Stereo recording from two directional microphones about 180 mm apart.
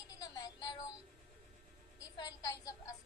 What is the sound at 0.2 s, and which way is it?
Music, 20° left (ahead or behind).